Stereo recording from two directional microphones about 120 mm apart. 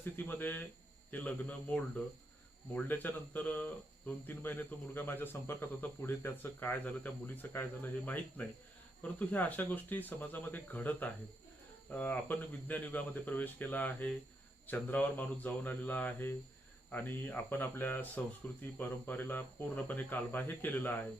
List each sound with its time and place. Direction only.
0.0 s speech: 15° left (ahead or behind)